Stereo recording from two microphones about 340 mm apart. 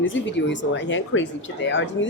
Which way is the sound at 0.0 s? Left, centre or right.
Left.